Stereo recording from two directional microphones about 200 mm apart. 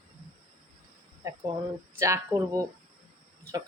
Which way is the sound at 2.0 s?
15° right (ahead or behind).